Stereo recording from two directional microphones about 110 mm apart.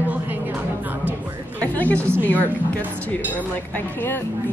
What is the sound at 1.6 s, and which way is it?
A woman's voice, 15° left (ahead or behind).